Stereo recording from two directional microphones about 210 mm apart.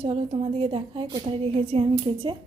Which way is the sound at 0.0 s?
30° right (ahead or behind).